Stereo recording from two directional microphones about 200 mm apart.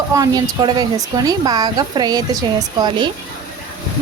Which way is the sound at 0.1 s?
15° right (ahead or behind).